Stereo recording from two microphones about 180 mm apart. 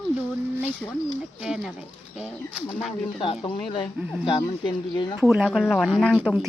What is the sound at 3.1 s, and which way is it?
Speech, 30° left (ahead or behind).